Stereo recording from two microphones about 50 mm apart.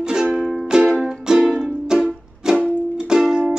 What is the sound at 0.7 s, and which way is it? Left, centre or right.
Music, centre.